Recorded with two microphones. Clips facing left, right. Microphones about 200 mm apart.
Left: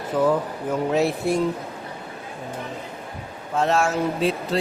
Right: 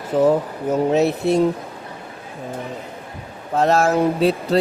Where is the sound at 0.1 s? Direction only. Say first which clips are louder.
Right 4 dB; 25° right (ahead or behind).